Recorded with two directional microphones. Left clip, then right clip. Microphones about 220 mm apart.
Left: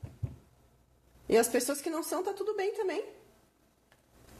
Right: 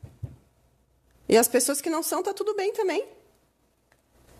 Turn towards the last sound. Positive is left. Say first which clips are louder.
# right 6 dB
turn(degrees=-50)  # may be behind; listen again after turning